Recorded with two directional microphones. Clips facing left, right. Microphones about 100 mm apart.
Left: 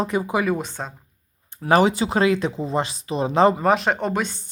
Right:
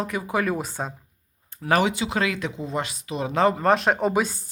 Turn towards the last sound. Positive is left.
turn(degrees=-5)  # may be behind; listen again after turning